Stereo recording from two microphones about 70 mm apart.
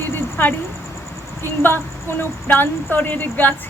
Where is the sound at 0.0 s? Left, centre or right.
Left.